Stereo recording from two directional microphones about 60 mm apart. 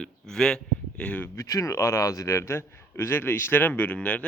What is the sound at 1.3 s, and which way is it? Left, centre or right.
A man's voice, left.